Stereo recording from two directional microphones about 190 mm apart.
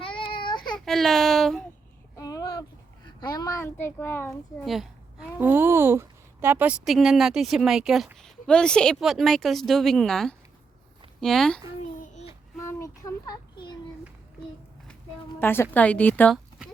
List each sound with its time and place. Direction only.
0.0 s child singing: 25° left (ahead or behind)
0.9 s a child's voice: centre (ahead or behind)
2.1 s a sound: 20° left (ahead or behind)
3.2 s a child's voice: 20° left (ahead or behind)
4.6 s a child's voice: centre (ahead or behind)
11.9 s child singing: 40° left (ahead or behind)
12.6 s a sound: 15° left (ahead or behind)
15.4 s a child's voice: 10° left (ahead or behind)